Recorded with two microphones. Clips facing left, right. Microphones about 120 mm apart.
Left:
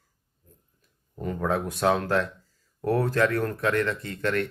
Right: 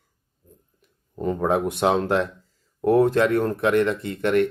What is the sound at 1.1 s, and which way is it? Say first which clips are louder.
Speech: right 5 dB; 25° right (ahead or behind).